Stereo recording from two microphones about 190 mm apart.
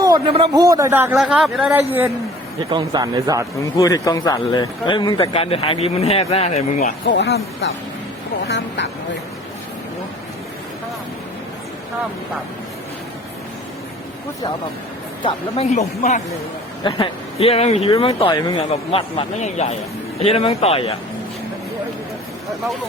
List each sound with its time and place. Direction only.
0.0 s a man's voice: 25° right (ahead or behind)
0.5 s a man's voice: 20° right (ahead or behind)
2.6 s speech: 20° right (ahead or behind)
3.6 s speech: 15° left (ahead or behind); by 6.9 s 35° left (ahead or behind)
7.1 s speech: 70° left (ahead or behind)
15.2 s speech: 30° left (ahead or behind)